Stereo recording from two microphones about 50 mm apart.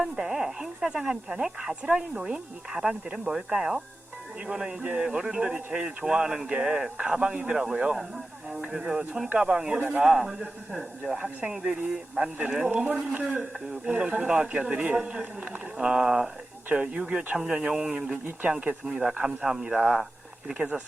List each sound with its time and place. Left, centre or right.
0.0 s speech: centre
11.2 s speech: right